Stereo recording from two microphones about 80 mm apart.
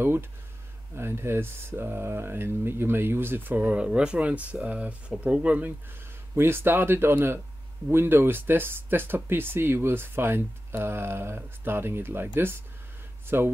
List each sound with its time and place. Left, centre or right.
0.0 s speech: right
6.3 s speech: right
13.3 s speech: right